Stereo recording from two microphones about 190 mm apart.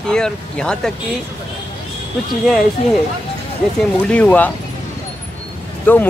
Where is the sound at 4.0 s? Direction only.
5° left (ahead or behind).